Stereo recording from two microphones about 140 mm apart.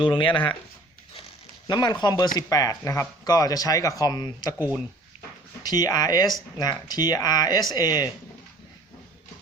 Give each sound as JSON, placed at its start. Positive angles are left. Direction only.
{"t": 0.0, "sound": "speech", "side_deg": 35}
{"t": 1.6, "sound": "speech", "side_deg": 30}
{"t": 5.6, "sound": "speech", "side_deg": 25}